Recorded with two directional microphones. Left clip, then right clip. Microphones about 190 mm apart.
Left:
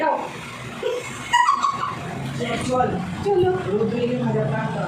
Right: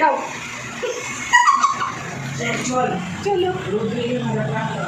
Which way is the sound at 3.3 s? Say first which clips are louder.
Even; 20° right (ahead or behind).